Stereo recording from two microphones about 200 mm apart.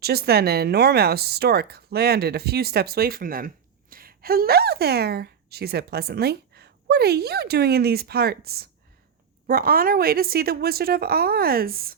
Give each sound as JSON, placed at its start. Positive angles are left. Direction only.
{"t": 0.0, "sound": "speech", "side_deg": -50}